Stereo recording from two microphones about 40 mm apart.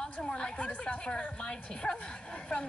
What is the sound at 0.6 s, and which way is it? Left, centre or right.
Speech, left.